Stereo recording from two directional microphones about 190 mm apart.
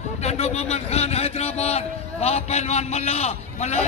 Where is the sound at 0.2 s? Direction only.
35° left (ahead or behind).